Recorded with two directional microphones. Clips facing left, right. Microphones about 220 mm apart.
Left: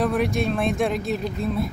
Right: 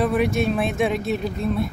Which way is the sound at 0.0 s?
Centre (ahead or behind).